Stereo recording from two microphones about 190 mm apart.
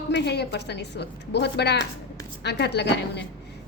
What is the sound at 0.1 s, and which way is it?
A woman's voice, 60° left (ahead or behind).